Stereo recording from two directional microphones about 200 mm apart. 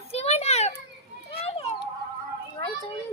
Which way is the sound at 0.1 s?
30° left (ahead or behind).